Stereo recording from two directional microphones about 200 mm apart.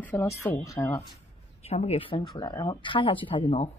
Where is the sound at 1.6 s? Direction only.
30° left (ahead or behind).